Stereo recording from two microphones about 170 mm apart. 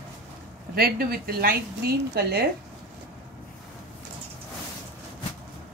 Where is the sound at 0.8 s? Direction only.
65° right (ahead or behind).